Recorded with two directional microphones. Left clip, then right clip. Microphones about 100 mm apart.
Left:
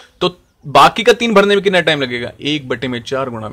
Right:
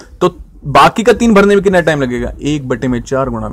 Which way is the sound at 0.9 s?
60° right (ahead or behind).